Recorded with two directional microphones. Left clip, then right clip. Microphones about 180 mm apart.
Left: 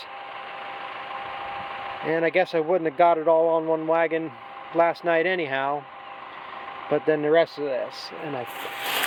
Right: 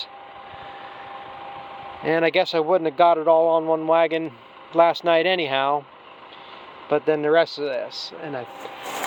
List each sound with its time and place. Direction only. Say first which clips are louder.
1.1 s engine: left 5 dB; 15° right (ahead or behind)
1.9 s a sound: right 4 dB; 20° right (ahead or behind)
2.3 s speech: right 2 dB; 5° right (ahead or behind)
6.9 s speech: right 2 dB; centre (ahead or behind)